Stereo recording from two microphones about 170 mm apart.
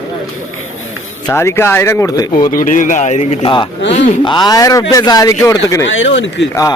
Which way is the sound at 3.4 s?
30° left (ahead or behind).